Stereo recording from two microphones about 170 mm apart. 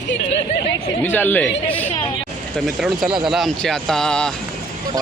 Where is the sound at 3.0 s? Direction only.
30° right (ahead or behind).